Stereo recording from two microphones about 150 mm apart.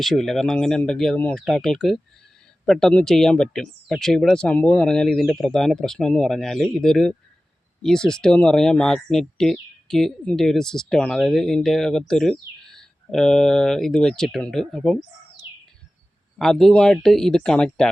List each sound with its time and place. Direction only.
0.0 s speech: centre (ahead or behind)
16.4 s speech: centre (ahead or behind)